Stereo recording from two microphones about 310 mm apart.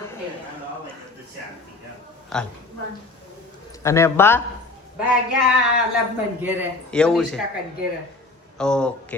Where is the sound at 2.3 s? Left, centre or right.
Centre.